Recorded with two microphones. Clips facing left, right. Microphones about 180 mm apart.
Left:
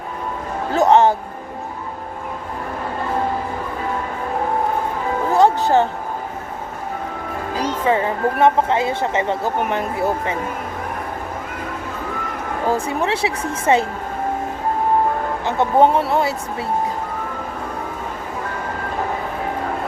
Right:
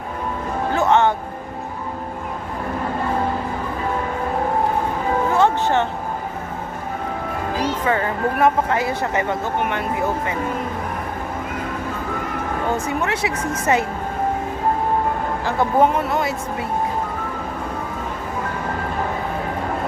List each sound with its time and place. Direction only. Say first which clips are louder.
0.7 s music: left 4 dB; 35° left (ahead or behind)
5.3 s music: left 5 dB; 35° left (ahead or behind)
7.9 s speech: left 5 dB; 25° left (ahead or behind)
9.4 s speech: left 2 dB; 35° left (ahead or behind)
12.6 s speech: left 4 dB; 35° left (ahead or behind)
15.4 s speech: left 2 dB; 30° left (ahead or behind)